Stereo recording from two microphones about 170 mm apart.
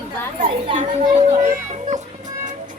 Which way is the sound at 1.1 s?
45° right (ahead or behind).